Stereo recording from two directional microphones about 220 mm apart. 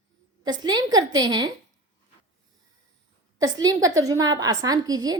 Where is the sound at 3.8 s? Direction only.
15° right (ahead or behind).